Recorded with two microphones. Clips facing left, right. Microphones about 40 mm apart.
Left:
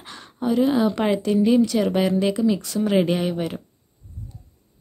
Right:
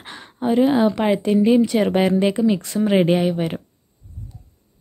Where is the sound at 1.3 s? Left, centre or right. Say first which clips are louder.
Right 2 dB; right.